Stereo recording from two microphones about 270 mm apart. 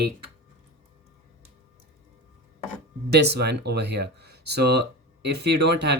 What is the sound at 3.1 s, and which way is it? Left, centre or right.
Speech, right.